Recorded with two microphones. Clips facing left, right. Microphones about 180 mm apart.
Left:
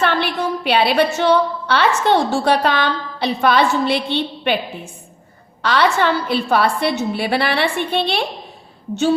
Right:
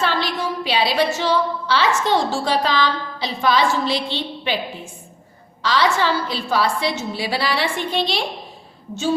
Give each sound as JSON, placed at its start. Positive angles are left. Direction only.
{"t": 0.0, "sound": "a woman's voice", "side_deg": 60}
{"t": 5.6, "sound": "a woman's voice", "side_deg": 60}